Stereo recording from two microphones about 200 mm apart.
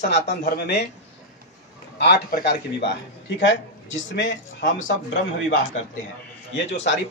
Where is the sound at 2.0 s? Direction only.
55° left (ahead or behind); by 4.9 s 70° left (ahead or behind).